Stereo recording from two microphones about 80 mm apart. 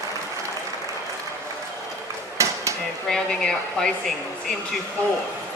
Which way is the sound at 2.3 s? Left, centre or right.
Right.